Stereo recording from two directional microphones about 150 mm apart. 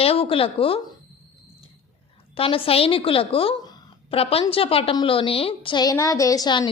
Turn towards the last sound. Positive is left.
turn(degrees=25)  # may be behind; listen again after turning